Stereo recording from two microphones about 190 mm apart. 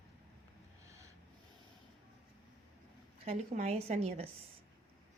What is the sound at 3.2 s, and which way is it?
A woman's voice, 35° right (ahead or behind).